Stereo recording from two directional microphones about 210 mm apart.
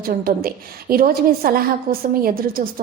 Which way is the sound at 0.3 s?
45° right (ahead or behind).